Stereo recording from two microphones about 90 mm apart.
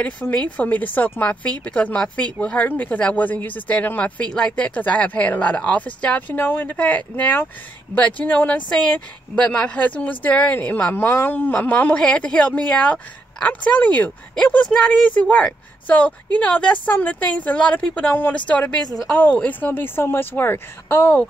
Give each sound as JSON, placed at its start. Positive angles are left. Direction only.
{"t": 0.0, "sound": "a woman's voice", "side_deg": 15}